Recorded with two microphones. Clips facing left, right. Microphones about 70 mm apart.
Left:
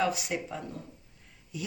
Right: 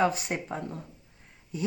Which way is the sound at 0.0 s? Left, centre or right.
Right.